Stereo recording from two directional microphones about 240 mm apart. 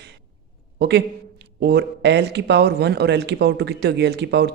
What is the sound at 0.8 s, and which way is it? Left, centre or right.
A man's voice, right.